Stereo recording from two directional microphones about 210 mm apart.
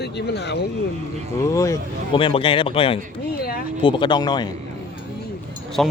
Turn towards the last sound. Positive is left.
turn(degrees=0)  # may be behind; listen again after turning